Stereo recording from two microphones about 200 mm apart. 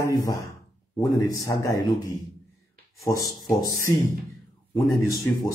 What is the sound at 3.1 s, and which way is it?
Speech, 20° left (ahead or behind).